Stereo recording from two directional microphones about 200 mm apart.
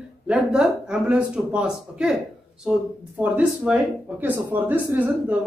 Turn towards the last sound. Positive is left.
turn(degrees=-10)  # may be behind; listen again after turning